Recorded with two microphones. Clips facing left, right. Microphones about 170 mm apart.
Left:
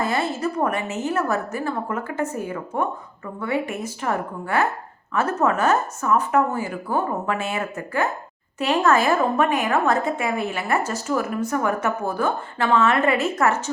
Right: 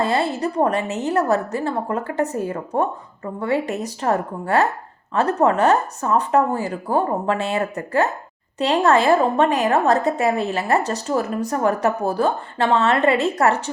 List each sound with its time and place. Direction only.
0.0 s a woman's voice: 30° right (ahead or behind)